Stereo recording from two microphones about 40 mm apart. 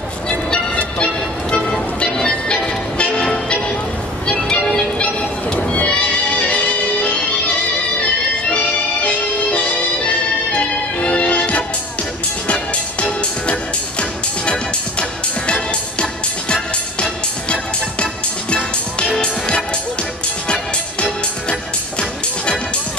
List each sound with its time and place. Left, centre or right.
0.3 s music: left
4.3 s music: left
9.0 s music: left
13.2 s music: left
21.0 s music: left